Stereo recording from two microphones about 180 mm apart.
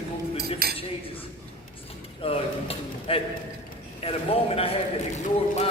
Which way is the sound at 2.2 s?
35° left (ahead or behind).